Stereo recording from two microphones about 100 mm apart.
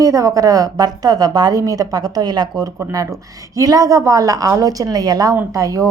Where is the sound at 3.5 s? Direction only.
40° right (ahead or behind).